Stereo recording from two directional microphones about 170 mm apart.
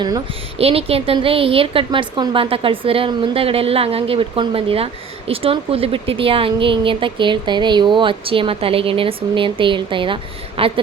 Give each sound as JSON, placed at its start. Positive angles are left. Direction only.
{"t": 0.6, "sound": "speech", "side_deg": -35}